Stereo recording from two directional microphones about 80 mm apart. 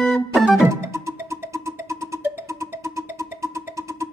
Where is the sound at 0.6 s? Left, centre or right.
Right.